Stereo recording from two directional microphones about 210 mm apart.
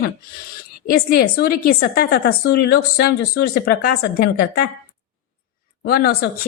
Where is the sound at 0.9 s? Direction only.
45° left (ahead or behind).